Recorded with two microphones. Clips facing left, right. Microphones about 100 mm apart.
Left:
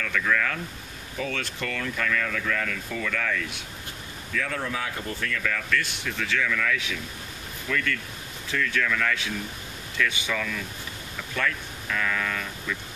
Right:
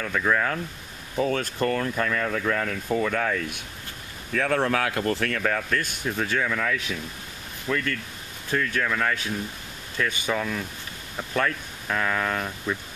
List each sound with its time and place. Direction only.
0.0 s speech: 30° right (ahead or behind)
4.3 s speech: 50° right (ahead or behind); by 8.0 s 35° right (ahead or behind)
8.5 s speech: 45° right (ahead or behind)